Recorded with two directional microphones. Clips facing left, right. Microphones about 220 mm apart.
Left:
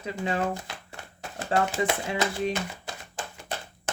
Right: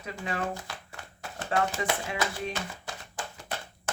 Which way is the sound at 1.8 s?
30° left (ahead or behind).